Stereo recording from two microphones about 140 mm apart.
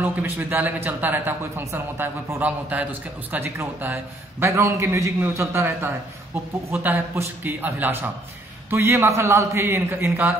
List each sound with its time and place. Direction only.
0.0 s a man's voice: 15° right (ahead or behind)